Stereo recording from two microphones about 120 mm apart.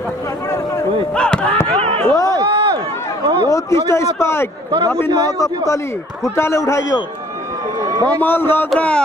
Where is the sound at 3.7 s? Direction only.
25° left (ahead or behind).